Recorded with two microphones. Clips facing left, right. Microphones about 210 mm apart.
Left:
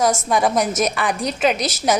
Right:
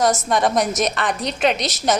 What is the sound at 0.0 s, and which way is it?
A woman's voice, 10° left (ahead or behind).